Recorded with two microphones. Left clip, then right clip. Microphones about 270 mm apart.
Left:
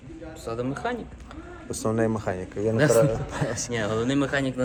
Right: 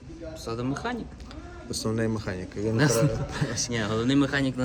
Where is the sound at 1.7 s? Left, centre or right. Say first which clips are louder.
Left 4 dB; centre.